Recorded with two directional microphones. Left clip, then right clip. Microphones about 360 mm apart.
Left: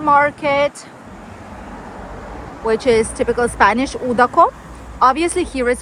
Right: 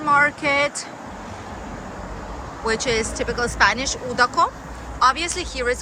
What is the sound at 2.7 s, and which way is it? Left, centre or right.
A woman's voice, centre.